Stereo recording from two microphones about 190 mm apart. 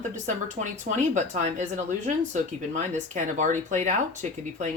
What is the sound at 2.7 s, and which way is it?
Speech, 40° right (ahead or behind).